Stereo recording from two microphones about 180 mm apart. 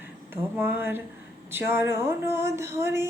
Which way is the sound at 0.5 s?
10° right (ahead or behind).